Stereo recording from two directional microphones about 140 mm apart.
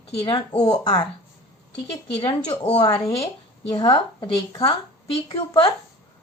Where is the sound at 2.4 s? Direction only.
50° left (ahead or behind).